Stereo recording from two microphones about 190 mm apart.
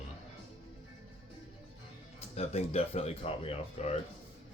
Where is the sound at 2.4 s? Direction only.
35° left (ahead or behind).